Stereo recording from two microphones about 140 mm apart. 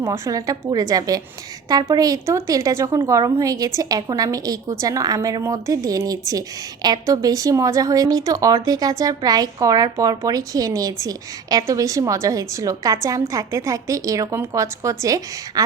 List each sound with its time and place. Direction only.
0.0 s a woman's voice: 20° right (ahead or behind)